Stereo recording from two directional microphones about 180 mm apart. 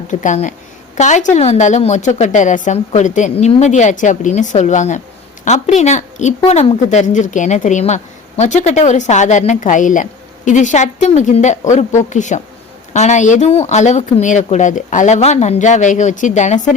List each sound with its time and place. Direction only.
0.1 s a woman's voice: 45° left (ahead or behind)